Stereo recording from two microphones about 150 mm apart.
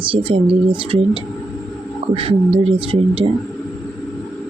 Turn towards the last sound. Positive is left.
turn(degrees=-40)  # may be behind; listen again after turning